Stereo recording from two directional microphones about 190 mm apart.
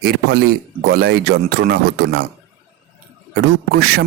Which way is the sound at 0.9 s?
55° right (ahead or behind).